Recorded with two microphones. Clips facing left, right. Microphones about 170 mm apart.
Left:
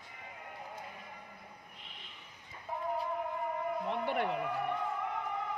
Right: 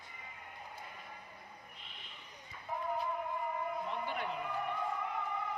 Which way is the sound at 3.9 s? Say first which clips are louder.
Left 6 dB; 65° left (ahead or behind).